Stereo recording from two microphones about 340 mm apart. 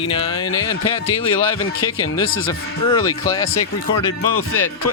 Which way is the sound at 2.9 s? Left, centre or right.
Centre.